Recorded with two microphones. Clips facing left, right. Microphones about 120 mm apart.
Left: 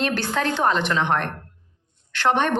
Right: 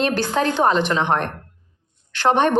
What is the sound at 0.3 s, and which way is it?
A woman's voice, 20° right (ahead or behind).